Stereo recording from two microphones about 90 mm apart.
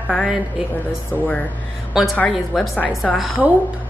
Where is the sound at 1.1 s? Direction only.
15° left (ahead or behind).